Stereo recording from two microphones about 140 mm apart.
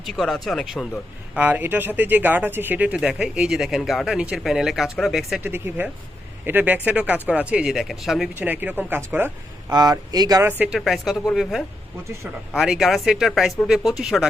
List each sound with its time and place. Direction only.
0.0 s speech: centre (ahead or behind)
1.4 s speech: 15° right (ahead or behind)
5.4 s speech: 15° right (ahead or behind)
8.4 s speech: 10° right (ahead or behind)
9.6 s speech: 30° right (ahead or behind)
10.8 s speech: centre (ahead or behind)